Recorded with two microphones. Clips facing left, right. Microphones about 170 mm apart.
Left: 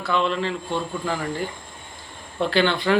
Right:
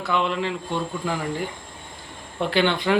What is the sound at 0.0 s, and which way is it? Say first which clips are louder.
Speech: left 1 dB; 15° right (ahead or behind).